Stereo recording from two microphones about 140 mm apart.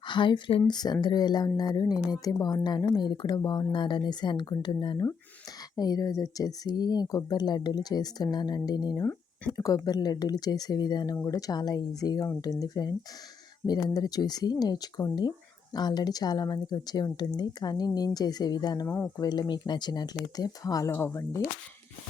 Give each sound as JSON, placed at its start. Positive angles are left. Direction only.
{"t": 0.1, "sound": "speech", "side_deg": 35}
{"t": 18.9, "sound": "speech", "side_deg": 15}
{"t": 19.2, "sound": "speech", "side_deg": 30}